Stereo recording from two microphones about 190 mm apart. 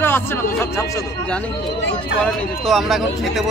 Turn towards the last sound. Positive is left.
turn(degrees=0)  # may be behind; listen again after turning